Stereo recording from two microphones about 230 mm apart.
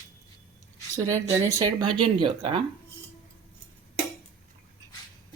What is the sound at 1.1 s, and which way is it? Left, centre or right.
Speech, centre.